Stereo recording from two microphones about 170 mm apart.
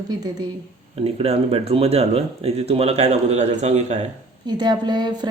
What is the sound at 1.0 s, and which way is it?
Speech, 35° right (ahead or behind).